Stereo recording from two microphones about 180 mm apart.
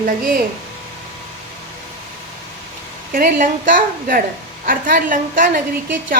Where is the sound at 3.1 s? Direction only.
50° right (ahead or behind).